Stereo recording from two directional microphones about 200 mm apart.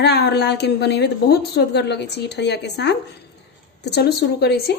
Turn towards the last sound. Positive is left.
turn(degrees=55)  # may be behind; listen again after turning